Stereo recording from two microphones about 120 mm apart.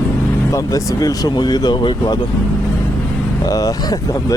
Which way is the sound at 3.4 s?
30° left (ahead or behind).